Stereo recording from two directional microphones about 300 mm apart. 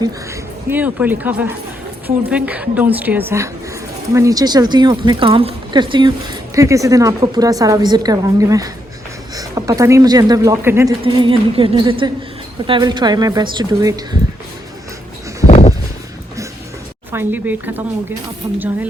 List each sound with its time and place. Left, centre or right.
0.0 s a woman's voice: centre
15.4 s a sound: left
17.1 s speech: centre